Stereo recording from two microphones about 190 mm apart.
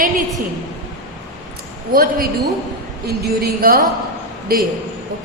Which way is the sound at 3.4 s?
50° right (ahead or behind).